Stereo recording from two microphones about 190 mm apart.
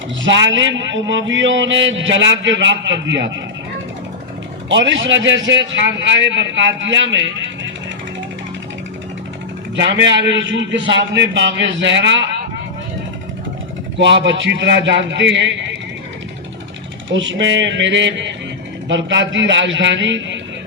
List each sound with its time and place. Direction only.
0.2 s a man's voice: 75° right (ahead or behind)
4.7 s a man's voice: 75° right (ahead or behind)
9.9 s a man's voice: 70° right (ahead or behind)
14.0 s a man's voice: 70° right (ahead or behind)
17.1 s a man's voice: 75° right (ahead or behind)